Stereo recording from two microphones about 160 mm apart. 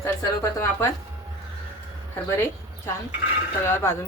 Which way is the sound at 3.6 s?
15° left (ahead or behind).